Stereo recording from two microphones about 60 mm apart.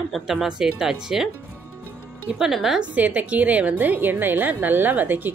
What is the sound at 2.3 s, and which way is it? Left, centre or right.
Speech, centre.